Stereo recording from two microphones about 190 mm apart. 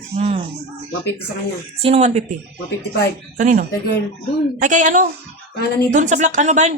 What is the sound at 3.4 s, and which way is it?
A woman's voice, 40° right (ahead or behind).